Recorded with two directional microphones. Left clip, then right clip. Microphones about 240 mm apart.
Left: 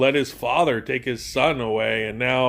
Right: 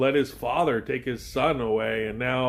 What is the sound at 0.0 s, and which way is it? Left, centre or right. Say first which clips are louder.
Speech: left 3 dB; left.